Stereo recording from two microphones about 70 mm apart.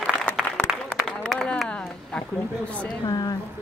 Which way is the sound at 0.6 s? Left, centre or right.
Centre.